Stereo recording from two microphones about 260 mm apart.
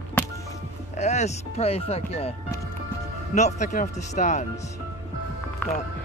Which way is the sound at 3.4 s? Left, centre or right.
Left.